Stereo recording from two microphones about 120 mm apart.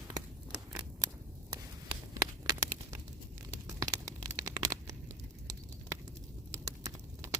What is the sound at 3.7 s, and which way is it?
Tearing, 30° right (ahead or behind).